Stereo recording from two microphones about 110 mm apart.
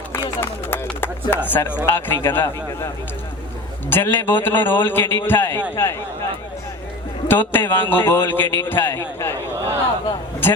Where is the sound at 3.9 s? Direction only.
20° left (ahead or behind).